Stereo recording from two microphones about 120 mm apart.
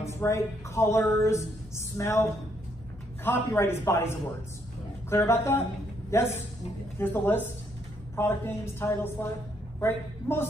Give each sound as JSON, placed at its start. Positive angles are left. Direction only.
{"t": 0.0, "sound": "speech", "side_deg": 25}
{"t": 3.3, "sound": "a man's voice", "side_deg": 20}